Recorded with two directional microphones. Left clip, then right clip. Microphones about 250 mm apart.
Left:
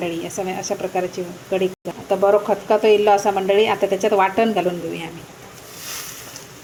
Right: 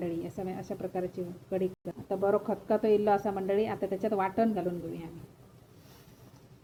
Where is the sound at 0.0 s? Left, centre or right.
Centre.